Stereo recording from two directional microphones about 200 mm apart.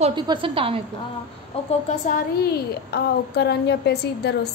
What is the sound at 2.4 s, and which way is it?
A woman's voice, 55° left (ahead or behind).